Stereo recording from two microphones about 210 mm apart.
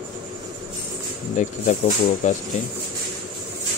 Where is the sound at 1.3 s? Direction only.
35° left (ahead or behind).